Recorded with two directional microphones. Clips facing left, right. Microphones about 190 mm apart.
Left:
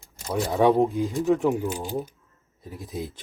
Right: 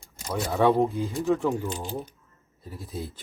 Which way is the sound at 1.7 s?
5° left (ahead or behind).